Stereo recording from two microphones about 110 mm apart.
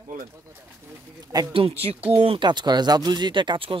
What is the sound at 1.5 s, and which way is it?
Speech, 60° right (ahead or behind).